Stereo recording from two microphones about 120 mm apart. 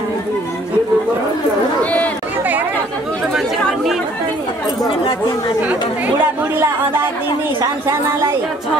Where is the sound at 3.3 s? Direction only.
Centre (ahead or behind).